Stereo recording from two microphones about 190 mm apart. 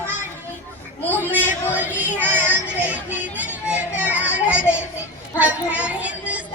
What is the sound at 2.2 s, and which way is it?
Music, 10° right (ahead or behind).